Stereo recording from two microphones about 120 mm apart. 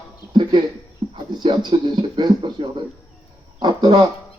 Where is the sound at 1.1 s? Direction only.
40° right (ahead or behind).